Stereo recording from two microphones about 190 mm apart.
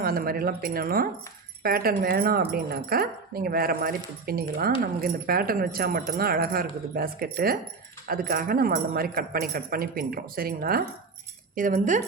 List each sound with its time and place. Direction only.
0.0 s speech: 50° right (ahead or behind)